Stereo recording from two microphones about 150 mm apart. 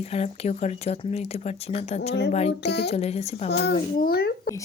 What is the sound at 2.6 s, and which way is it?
Speech, 90° left.